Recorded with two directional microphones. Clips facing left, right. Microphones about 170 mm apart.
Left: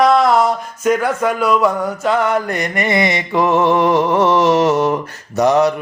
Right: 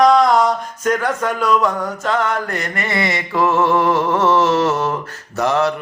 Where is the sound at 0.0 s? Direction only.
5° left (ahead or behind).